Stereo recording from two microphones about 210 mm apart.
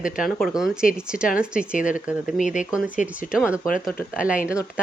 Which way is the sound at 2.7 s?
5° right (ahead or behind).